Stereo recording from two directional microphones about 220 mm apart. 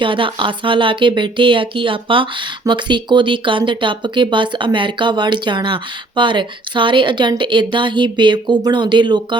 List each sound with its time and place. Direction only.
0.0 s speech: 20° right (ahead or behind)